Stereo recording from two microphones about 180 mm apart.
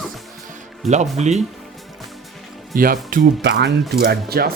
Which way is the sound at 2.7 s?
50° right (ahead or behind).